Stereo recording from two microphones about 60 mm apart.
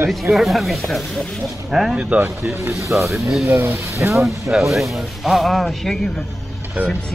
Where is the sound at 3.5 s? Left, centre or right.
Right.